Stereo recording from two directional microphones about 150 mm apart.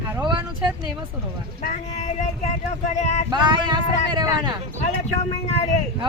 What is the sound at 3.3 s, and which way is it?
Speech, 30° right (ahead or behind).